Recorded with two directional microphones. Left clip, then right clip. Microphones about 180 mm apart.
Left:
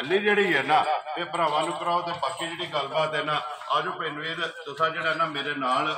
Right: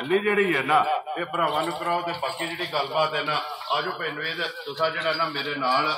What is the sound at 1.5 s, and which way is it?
A man's voice, 30° right (ahead or behind).